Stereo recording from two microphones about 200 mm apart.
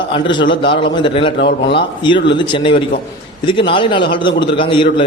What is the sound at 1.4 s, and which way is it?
Speech, 60° left (ahead or behind).